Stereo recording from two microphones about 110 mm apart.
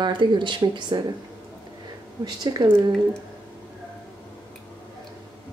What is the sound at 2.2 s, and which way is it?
Speech, 40° right (ahead or behind).